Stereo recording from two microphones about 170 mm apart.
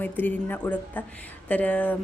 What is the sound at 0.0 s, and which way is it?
A woman's voice, 10° left (ahead or behind).